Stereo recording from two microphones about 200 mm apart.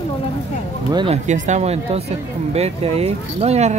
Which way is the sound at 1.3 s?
35° right (ahead or behind).